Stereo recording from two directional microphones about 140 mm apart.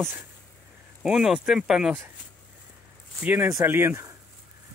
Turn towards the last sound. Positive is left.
turn(degrees=-20)  # may be behind; listen again after turning